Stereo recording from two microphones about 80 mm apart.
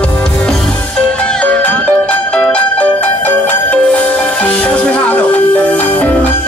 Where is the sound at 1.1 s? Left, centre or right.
Centre.